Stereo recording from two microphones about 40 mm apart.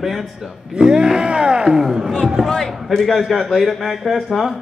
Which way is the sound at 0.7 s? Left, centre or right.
Centre.